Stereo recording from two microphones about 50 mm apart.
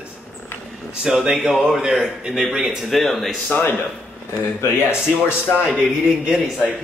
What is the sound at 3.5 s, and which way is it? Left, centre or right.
Speech, left.